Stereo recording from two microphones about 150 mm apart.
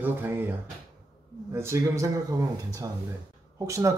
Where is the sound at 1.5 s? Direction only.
20° right (ahead or behind).